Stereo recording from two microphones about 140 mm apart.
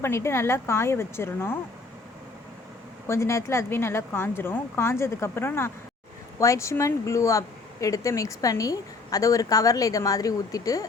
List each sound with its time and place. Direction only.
0.0 s a woman's voice: 20° left (ahead or behind)
3.1 s a woman's voice: 20° left (ahead or behind)